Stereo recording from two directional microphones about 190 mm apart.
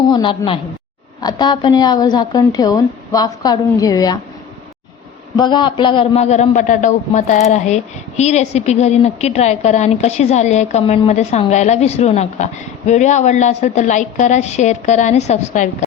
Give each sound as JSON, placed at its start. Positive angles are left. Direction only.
{"t": 0.1, "sound": "a woman's voice", "side_deg": 25}
{"t": 5.4, "sound": "a man's voice", "side_deg": 25}